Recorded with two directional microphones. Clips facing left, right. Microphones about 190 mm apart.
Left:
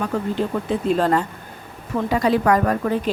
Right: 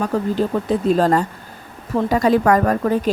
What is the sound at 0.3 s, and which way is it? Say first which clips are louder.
Speech: right 3 dB; 40° right (ahead or behind).